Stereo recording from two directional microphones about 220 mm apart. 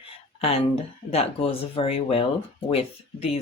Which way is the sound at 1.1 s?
25° left (ahead or behind).